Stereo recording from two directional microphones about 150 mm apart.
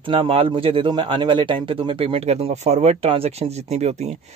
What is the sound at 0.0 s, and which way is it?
A man's voice, 35° right (ahead or behind).